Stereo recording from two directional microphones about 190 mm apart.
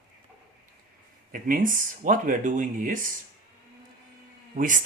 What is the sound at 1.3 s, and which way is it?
Speech, 45° right (ahead or behind).